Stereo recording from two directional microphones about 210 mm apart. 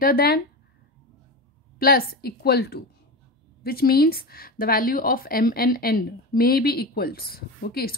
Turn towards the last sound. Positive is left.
turn(degrees=45)  # may be behind; listen again after turning